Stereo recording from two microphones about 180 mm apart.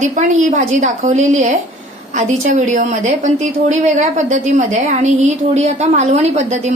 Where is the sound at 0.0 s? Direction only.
45° right (ahead or behind).